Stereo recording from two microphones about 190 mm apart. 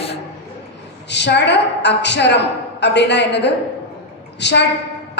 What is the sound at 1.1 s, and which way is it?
A woman's voice, 65° left (ahead or behind).